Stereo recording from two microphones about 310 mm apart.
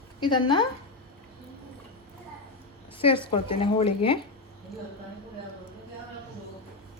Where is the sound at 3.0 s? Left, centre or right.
Centre.